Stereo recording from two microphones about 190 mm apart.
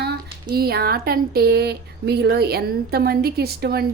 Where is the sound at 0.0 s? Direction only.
55° right (ahead or behind).